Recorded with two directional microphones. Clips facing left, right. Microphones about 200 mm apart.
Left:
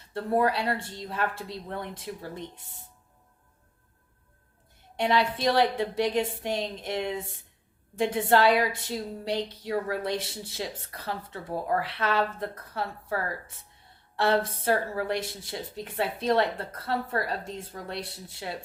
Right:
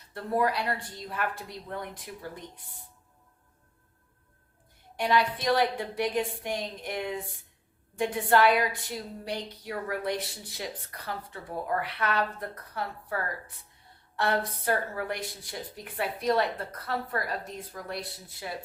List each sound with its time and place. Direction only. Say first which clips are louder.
0.1 s a woman's voice: left 3 dB; 30° left (ahead or behind)
4.9 s a woman's voice: left 1 dB; 25° left (ahead or behind)